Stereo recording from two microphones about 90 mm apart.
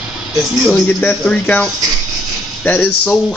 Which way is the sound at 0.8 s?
15° left (ahead or behind).